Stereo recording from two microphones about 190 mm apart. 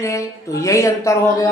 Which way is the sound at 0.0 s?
15° left (ahead or behind).